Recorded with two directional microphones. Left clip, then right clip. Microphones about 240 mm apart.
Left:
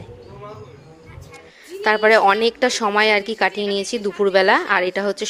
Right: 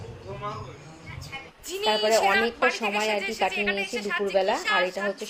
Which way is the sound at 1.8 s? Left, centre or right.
Left.